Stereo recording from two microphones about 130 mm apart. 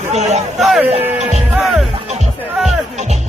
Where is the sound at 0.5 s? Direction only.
Centre (ahead or behind).